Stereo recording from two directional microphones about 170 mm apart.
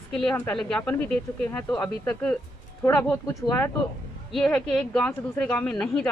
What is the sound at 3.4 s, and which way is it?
Speech, 20° left (ahead or behind).